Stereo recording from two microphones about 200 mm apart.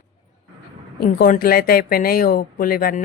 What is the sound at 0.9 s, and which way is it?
Speech, 45° left (ahead or behind).